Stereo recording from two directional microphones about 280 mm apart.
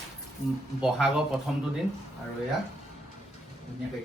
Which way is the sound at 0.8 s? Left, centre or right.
Centre.